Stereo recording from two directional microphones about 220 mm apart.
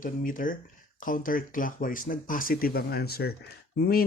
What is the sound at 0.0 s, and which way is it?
Speech, 35° left (ahead or behind).